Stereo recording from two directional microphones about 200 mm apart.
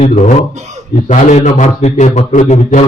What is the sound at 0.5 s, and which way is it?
Speech, 35° right (ahead or behind).